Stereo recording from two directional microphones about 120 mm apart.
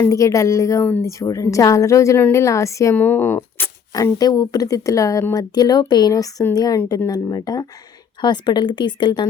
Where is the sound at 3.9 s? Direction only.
30° left (ahead or behind).